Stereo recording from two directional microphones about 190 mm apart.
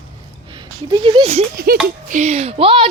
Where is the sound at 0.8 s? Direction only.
25° right (ahead or behind).